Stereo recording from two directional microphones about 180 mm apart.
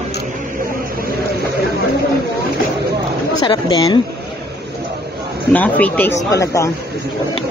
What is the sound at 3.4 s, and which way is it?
Speech, 25° left (ahead or behind).